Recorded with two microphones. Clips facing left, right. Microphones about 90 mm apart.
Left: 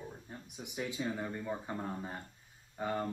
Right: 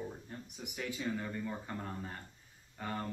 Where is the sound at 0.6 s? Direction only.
20° left (ahead or behind).